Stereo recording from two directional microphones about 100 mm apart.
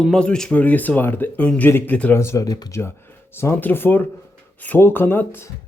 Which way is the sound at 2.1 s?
25° left (ahead or behind).